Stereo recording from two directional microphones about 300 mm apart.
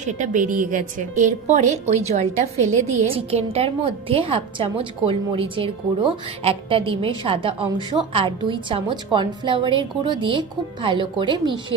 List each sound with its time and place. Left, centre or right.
0.0 s a woman's voice: right